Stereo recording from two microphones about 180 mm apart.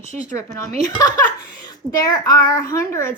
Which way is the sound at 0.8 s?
20° left (ahead or behind).